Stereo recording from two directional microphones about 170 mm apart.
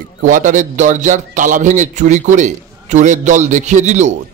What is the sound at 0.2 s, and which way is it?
A man's voice, 50° right (ahead or behind).